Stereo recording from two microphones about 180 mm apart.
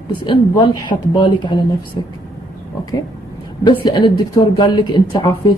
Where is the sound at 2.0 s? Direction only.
25° left (ahead or behind).